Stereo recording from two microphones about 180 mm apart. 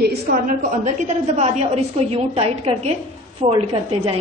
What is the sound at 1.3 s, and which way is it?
A woman's voice, 35° right (ahead or behind).